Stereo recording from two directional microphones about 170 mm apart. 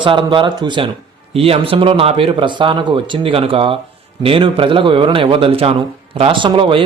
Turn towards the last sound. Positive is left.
turn(degrees=-30)  # may be behind; listen again after turning